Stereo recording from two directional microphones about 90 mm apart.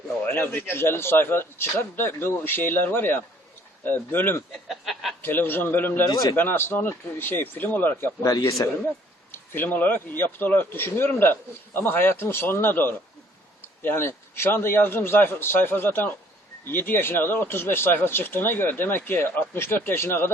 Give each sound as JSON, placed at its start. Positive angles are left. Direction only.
{"t": 0.3, "sound": "speech", "side_deg": 25}
{"t": 4.7, "sound": "a sound", "side_deg": 0}
{"t": 5.2, "sound": "speech", "side_deg": 25}
{"t": 8.2, "sound": "a man's voice", "side_deg": 40}
{"t": 9.3, "sound": "speech", "side_deg": 25}